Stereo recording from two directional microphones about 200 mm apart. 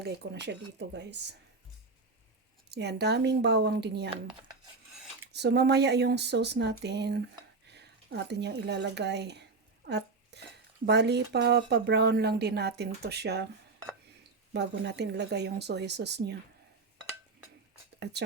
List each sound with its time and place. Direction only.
0.0 s speech: 55° right (ahead or behind)
2.6 s speech: 55° right (ahead or behind)
5.3 s speech: 55° right (ahead or behind)
7.7 s a sound: 60° right (ahead or behind)
10.8 s speech: 55° right (ahead or behind)
14.5 s speech: 60° right (ahead or behind)